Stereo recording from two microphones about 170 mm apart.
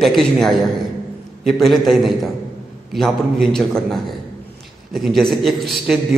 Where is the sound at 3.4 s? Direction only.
Centre (ahead or behind).